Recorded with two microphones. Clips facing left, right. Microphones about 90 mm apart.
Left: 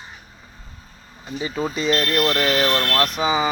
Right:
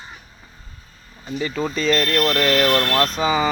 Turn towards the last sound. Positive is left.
turn(degrees=15)  # may be behind; listen again after turning